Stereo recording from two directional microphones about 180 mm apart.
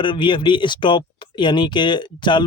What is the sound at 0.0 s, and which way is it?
Speech, 25° left (ahead or behind).